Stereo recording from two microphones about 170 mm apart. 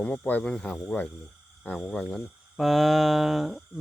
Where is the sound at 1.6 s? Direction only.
10° left (ahead or behind).